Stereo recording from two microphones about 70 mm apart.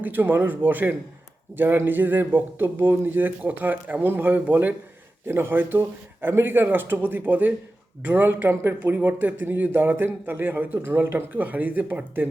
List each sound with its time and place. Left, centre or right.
0.0 s speech: right